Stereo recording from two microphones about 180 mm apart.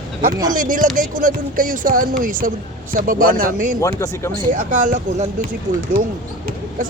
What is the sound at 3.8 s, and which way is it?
Speech, 15° left (ahead or behind).